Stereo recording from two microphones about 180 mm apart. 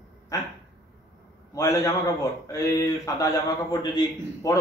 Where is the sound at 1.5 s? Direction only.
20° left (ahead or behind).